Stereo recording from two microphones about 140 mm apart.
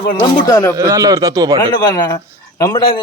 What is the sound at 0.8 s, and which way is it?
Speech, 25° right (ahead or behind).